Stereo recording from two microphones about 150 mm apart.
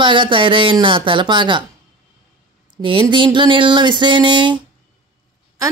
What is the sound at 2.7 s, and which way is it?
Speech, 30° right (ahead or behind).